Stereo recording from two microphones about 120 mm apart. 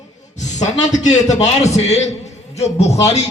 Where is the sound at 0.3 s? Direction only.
75° left (ahead or behind).